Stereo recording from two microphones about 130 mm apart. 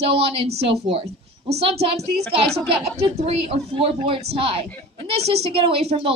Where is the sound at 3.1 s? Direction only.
50° right (ahead or behind).